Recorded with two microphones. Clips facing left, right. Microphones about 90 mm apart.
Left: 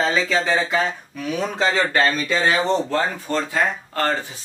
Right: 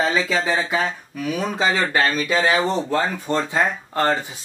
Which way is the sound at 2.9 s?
20° right (ahead or behind).